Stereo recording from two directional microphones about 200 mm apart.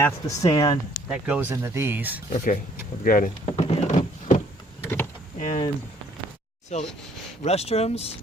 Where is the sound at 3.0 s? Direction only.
45° left (ahead or behind).